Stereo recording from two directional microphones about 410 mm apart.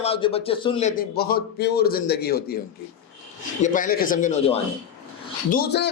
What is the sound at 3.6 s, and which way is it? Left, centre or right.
A man's voice, centre.